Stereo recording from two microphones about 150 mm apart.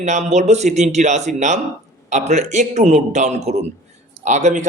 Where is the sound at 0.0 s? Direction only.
50° right (ahead or behind).